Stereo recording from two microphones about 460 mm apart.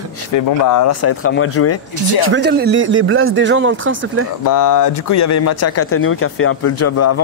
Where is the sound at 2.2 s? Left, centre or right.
Right.